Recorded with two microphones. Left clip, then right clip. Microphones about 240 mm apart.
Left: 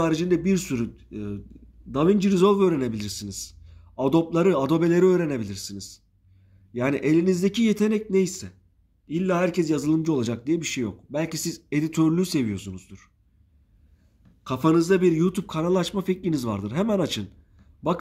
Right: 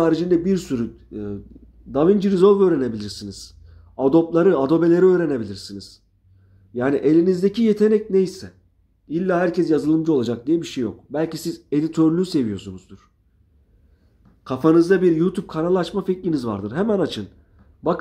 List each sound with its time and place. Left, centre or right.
0.1 s a man's voice: left
5.4 s speech: left
6.7 s a man's voice: left
14.4 s a man's voice: left